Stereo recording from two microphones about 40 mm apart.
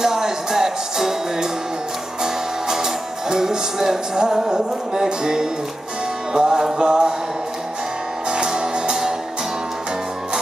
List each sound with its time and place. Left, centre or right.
0.0 s music: centre
8.3 s music: centre